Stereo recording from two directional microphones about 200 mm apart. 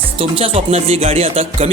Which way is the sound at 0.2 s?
30° right (ahead or behind).